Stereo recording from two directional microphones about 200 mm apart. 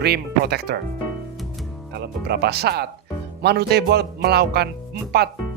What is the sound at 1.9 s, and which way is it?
Speech, 55° right (ahead or behind).